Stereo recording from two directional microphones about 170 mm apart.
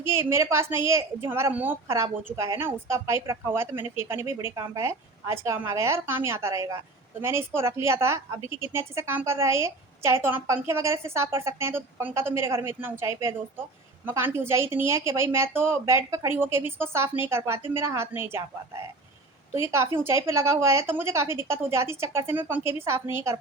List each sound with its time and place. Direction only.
0.0 s a woman's voice: 15° right (ahead or behind)